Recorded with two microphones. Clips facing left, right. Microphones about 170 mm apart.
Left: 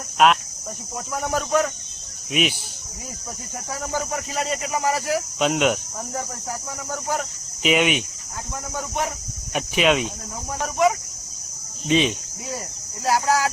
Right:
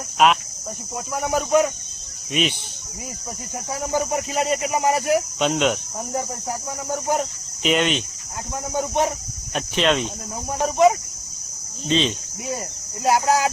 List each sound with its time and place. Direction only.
0.2 s speech: centre (ahead or behind)
2.3 s speech: 5° left (ahead or behind)
3.7 s speech: 20° right (ahead or behind)
5.4 s speech: 5° left (ahead or behind)
6.9 s speech: 20° right (ahead or behind)
7.6 s speech: 5° left (ahead or behind)
8.7 s speech: 25° right (ahead or behind)
9.5 s speech: 10° left (ahead or behind)
10.6 s speech: 25° right (ahead or behind)
11.9 s speech: 10° left (ahead or behind)
13.1 s speech: 20° right (ahead or behind)